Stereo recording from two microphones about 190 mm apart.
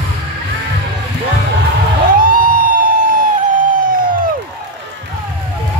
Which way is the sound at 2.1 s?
45° right (ahead or behind).